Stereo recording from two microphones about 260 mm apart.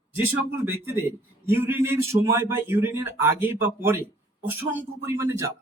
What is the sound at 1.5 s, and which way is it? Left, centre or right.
A man's voice, centre.